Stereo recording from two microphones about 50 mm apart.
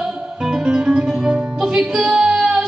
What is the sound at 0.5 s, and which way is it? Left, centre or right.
Music, centre.